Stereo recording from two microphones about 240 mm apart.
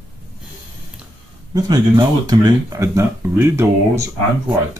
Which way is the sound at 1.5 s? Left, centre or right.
Centre.